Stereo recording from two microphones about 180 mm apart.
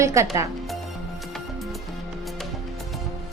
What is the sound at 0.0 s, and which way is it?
Speech, 15° right (ahead or behind).